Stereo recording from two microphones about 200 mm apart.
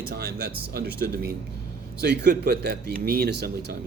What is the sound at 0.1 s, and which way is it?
Speech, 50° right (ahead or behind).